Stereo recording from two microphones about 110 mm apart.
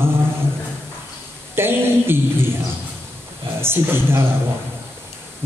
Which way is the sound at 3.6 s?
20° right (ahead or behind).